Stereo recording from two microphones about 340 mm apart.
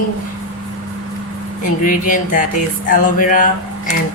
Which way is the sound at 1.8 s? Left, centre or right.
Left.